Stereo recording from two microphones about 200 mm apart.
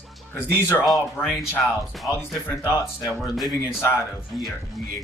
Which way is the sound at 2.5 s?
15° left (ahead or behind).